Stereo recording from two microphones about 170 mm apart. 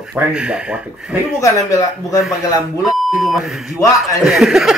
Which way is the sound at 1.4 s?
20° left (ahead or behind).